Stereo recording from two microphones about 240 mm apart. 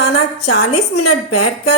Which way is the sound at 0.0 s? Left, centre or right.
Left.